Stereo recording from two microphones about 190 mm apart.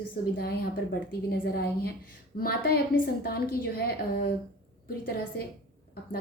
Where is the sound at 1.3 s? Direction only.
55° left (ahead or behind).